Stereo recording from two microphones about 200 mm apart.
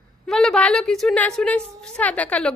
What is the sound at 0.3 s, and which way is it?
A woman's voice, 5° left (ahead or behind).